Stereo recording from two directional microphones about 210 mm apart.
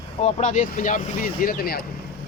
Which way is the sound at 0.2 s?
30° left (ahead or behind).